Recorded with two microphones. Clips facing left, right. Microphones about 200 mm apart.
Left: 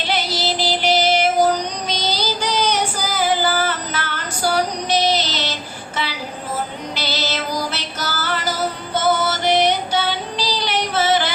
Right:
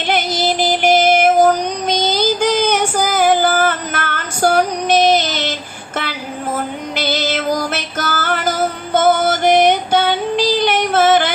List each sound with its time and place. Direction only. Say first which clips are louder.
0.1 s child singing: right 6 dB; 50° right (ahead or behind)
6.0 s music: right 3 dB; 50° right (ahead or behind)